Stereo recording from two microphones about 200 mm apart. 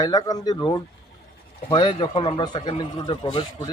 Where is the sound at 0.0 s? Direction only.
20° left (ahead or behind).